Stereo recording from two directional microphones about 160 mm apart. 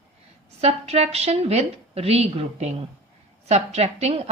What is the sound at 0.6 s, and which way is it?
A woman's voice, 40° right (ahead or behind).